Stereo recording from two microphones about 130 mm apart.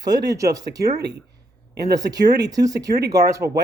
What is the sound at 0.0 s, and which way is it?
Speech, 30° right (ahead or behind).